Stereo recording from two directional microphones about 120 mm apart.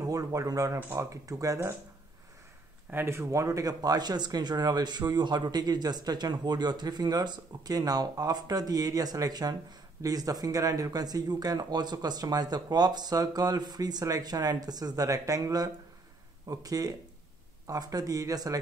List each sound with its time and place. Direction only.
0.0 s speech: 30° right (ahead or behind)
2.9 s speech: 20° right (ahead or behind)